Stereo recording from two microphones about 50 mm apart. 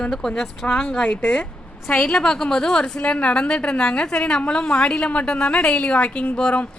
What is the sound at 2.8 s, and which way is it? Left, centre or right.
A woman's voice, left.